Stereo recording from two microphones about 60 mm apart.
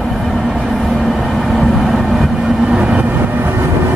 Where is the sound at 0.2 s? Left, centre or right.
Centre; by 3.5 s right.